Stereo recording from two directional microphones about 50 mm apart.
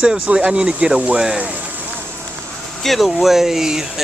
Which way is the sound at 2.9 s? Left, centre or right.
Centre.